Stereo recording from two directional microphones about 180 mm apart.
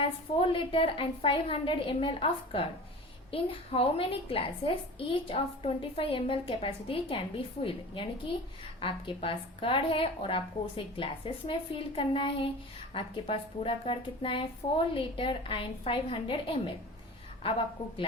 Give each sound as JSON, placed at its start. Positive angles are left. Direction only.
{"t": 0.0, "sound": "a woman's voice", "side_deg": 30}